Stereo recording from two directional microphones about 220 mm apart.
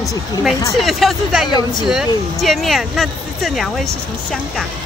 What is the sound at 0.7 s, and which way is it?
Speech, centre (ahead or behind).